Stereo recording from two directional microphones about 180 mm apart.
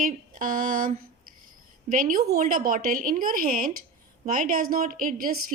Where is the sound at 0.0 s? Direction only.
50° right (ahead or behind).